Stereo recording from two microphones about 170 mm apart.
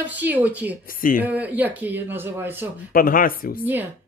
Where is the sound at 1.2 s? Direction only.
10° right (ahead or behind).